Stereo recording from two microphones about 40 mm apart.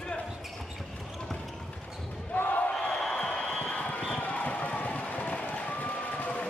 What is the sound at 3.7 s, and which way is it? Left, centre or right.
Run, left.